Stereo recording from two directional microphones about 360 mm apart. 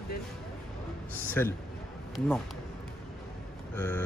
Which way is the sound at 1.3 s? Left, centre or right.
Centre.